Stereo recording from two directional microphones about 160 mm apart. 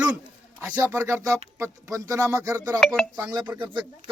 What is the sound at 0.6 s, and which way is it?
Speech, 15° right (ahead or behind).